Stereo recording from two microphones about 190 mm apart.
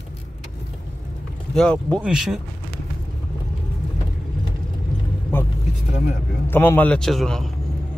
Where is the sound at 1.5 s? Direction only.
5° left (ahead or behind).